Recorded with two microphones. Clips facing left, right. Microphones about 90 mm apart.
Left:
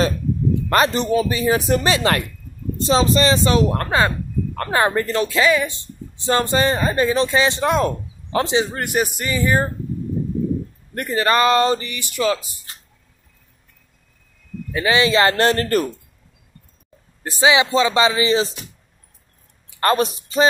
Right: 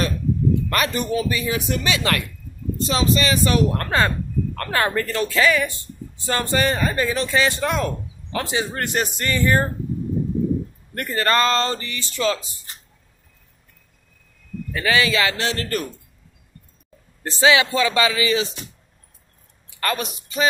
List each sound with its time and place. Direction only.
0.7 s a woman's voice: 30° left (ahead or behind)
8.7 s speech: 10° left (ahead or behind)
11.0 s speech: 15° left (ahead or behind)
14.7 s a woman's voice: 20° left (ahead or behind)
15.2 s speech: 45° left (ahead or behind)
17.2 s a woman's voice: 15° left (ahead or behind); by 18.5 s 30° left (ahead or behind)
19.8 s speech: 35° left (ahead or behind)